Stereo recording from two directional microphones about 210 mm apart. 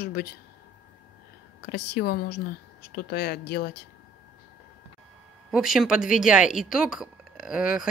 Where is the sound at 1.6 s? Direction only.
50° left (ahead or behind).